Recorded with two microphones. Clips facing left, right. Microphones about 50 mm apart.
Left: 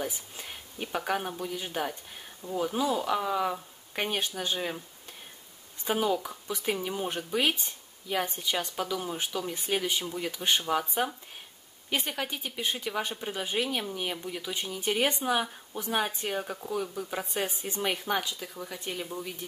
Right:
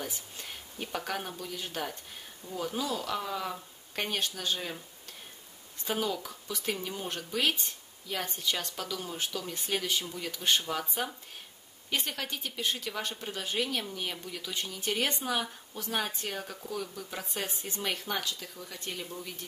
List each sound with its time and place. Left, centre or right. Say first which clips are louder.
0.0 s a woman's voice: left 4 dB; centre
5.9 s a woman's voice: left 5 dB; centre